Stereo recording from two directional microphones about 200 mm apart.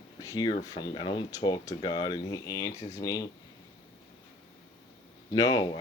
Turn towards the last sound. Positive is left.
turn(degrees=20)  # may be behind; listen again after turning